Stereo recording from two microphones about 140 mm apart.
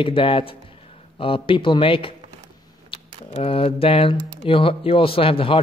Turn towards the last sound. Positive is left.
turn(degrees=40)  # may be behind; listen again after turning